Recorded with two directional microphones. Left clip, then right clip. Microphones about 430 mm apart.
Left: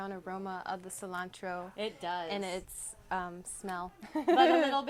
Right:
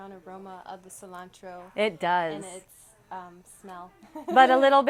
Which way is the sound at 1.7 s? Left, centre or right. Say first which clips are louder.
Right 16 dB; right.